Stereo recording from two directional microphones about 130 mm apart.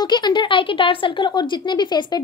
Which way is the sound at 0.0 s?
35° left (ahead or behind).